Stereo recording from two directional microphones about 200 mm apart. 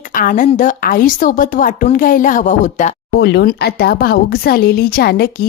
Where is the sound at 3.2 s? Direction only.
60° left (ahead or behind).